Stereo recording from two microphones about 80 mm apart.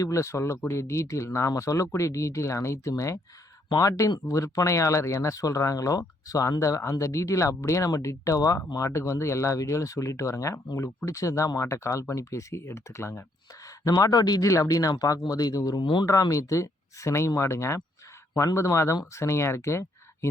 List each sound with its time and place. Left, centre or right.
0.0 s speech: left
13.8 s speech: left
14.5 s speech: left
15.8 s speech: left
16.3 s speech: left